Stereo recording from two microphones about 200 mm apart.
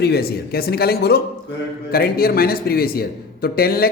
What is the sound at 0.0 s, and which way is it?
Speech, 50° left (ahead or behind).